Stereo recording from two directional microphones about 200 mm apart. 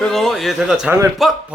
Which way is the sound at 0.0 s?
Centre (ahead or behind).